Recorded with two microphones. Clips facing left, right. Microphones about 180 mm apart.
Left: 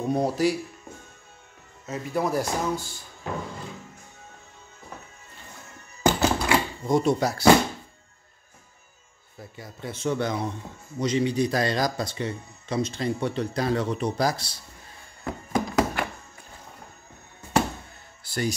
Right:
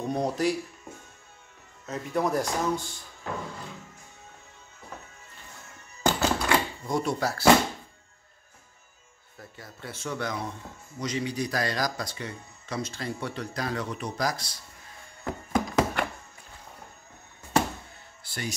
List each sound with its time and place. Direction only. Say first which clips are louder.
0.0 s speech: left 3 dB; 5° left (ahead or behind)
1.9 s speech: left 1 dB; 5° left (ahead or behind)
6.0 s thunk: left 3 dB; 10° left (ahead or behind)
6.9 s speech: left 6 dB; 20° left (ahead or behind)
9.4 s speech: left 5 dB; 15° left (ahead or behind)
15.5 s thunk: left 1 dB; 5° left (ahead or behind)
18.2 s music: left 8 dB; 40° left (ahead or behind)